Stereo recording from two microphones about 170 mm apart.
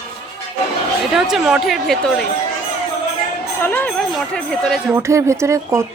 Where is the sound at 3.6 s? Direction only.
10° left (ahead or behind).